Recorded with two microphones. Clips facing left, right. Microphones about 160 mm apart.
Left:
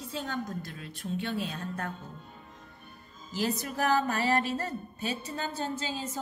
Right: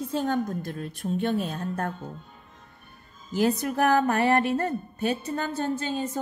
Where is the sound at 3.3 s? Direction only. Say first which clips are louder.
Right 7 dB; 55° right (ahead or behind).